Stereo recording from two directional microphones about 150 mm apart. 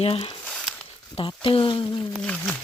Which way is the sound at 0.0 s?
40° left (ahead or behind).